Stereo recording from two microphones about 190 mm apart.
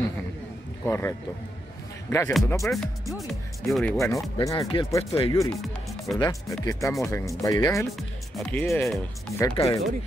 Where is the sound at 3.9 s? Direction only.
15° left (ahead or behind).